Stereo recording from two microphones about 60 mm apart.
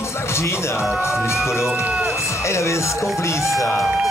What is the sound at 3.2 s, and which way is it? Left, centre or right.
Speech, left.